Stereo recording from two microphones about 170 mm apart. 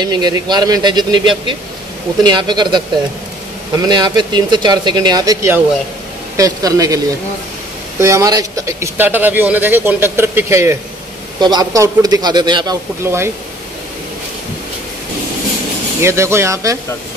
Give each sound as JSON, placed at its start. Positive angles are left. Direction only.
{"t": 0.0, "sound": "speech", "side_deg": -25}
{"t": 8.0, "sound": "speech", "side_deg": -20}
{"t": 13.0, "sound": "speech", "side_deg": -15}
{"t": 16.0, "sound": "speech", "side_deg": -15}